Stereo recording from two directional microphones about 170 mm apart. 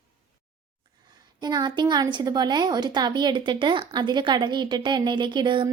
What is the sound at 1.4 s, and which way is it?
A woman's voice, 25° right (ahead or behind).